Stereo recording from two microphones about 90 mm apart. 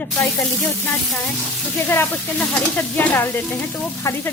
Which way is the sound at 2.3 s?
20° left (ahead or behind).